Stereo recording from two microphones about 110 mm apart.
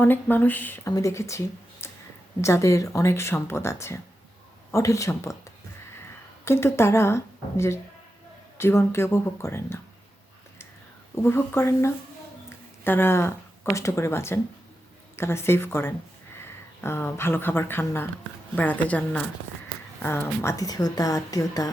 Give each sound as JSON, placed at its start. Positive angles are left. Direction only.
{"t": 0.0, "sound": "speech", "side_deg": 15}
{"t": 0.9, "sound": "speech", "side_deg": 25}
{"t": 6.4, "sound": "speech", "side_deg": 25}
{"t": 11.1, "sound": "speech", "side_deg": 20}